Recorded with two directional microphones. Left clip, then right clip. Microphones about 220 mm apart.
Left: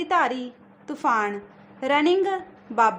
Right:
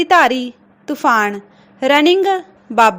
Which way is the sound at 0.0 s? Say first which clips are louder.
Right 11 dB; 30° right (ahead or behind).